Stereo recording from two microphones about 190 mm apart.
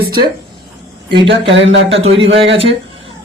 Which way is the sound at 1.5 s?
75° right (ahead or behind).